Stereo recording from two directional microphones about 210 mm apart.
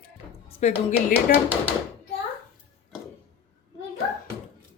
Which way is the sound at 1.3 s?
45° left (ahead or behind).